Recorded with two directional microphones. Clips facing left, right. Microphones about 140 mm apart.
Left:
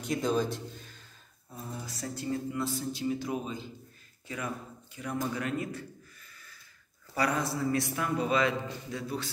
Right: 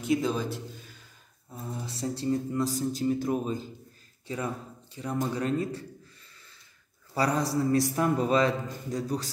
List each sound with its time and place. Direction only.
0.0 s speech: 5° right (ahead or behind)
1.9 s a man's voice: 30° right (ahead or behind); by 3.6 s 45° right (ahead or behind)
4.9 s a sound: 30° right (ahead or behind)
7.2 s a man's voice: 35° right (ahead or behind)